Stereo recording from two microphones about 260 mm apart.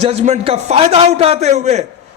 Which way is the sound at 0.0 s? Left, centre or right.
Right.